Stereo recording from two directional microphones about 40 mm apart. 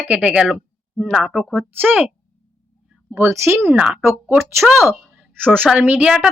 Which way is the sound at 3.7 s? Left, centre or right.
Right.